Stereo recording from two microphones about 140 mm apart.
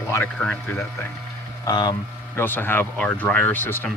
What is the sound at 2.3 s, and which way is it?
Speech, 15° left (ahead or behind).